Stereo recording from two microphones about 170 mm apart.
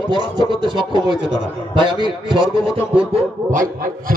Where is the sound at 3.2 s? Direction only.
45° right (ahead or behind).